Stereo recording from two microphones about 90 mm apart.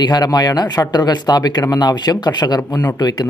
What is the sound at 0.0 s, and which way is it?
Speech, 50° left (ahead or behind).